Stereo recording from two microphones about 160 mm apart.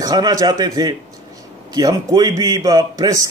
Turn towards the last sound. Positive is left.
turn(degrees=-20)  # may be behind; listen again after turning